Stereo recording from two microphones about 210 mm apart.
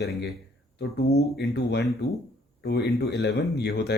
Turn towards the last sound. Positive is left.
turn(degrees=50)  # may be behind; listen again after turning